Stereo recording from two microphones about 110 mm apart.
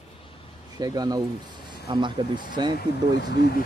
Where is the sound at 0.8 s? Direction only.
35° right (ahead or behind).